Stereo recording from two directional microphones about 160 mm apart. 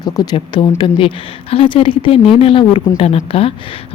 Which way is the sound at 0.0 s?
25° left (ahead or behind).